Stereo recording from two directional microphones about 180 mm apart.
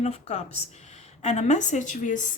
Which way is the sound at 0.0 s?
35° left (ahead or behind).